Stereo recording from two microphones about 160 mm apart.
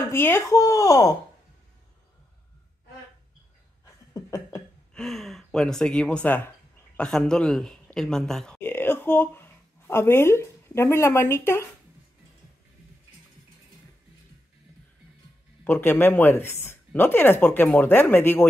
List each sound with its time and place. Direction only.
0.1 s speech: 15° left (ahead or behind)
3.8 s a sound: 20° left (ahead or behind)
4.9 s a man's voice: centre (ahead or behind)
15.6 s speech: 15° left (ahead or behind)